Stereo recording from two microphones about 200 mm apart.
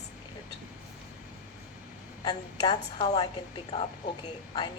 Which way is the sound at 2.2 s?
25° left (ahead or behind).